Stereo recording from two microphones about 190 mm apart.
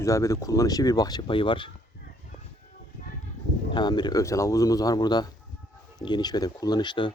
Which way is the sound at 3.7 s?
25° left (ahead or behind).